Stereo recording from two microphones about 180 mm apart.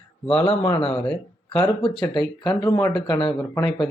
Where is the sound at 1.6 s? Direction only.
25° left (ahead or behind).